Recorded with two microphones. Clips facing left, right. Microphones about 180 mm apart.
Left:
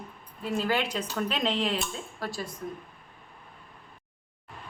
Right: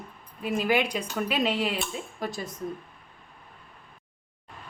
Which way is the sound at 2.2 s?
20° right (ahead or behind).